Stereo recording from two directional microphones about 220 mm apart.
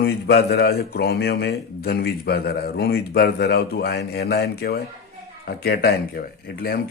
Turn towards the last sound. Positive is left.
turn(degrees=45)  # may be behind; listen again after turning